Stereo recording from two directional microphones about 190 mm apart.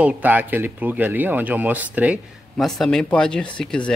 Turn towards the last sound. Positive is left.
turn(degrees=5)  # may be behind; listen again after turning